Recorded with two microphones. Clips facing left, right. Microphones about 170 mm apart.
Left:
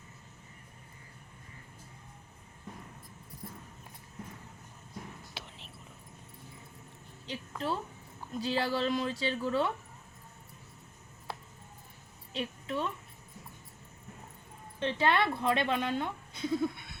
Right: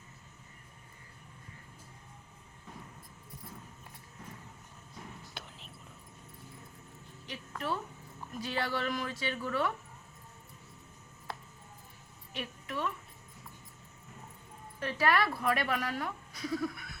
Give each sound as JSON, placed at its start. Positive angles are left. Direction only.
{"t": 5.3, "sound": "whispering", "side_deg": 0}
{"t": 7.3, "sound": "a woman's voice", "side_deg": 30}
{"t": 12.3, "sound": "a woman's voice", "side_deg": 30}
{"t": 14.8, "sound": "a woman's voice", "side_deg": 25}